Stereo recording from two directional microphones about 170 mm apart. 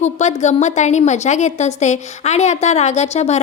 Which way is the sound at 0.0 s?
40° left (ahead or behind).